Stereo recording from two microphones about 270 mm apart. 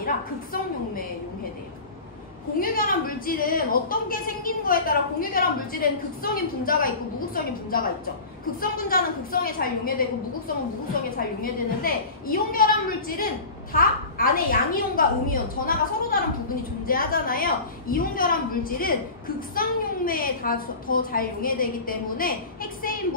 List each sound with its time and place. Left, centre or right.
0.0 s a sound: left
2.6 s a woman's voice: left
8.5 s a woman's voice: left
11.4 s a woman's voice: left